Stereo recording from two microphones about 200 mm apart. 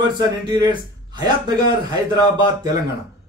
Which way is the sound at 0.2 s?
20° right (ahead or behind).